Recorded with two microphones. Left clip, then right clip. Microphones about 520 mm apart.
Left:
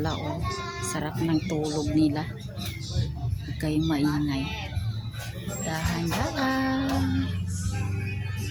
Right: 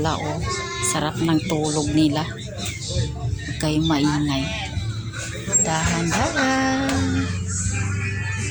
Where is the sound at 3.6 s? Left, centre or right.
Left.